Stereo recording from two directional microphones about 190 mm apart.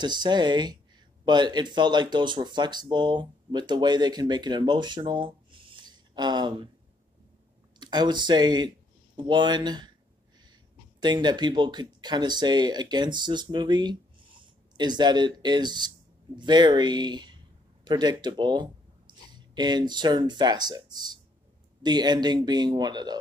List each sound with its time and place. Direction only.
0.0 s speech: 25° right (ahead or behind)
7.8 s speech: 25° right (ahead or behind)
11.0 s speech: 25° right (ahead or behind)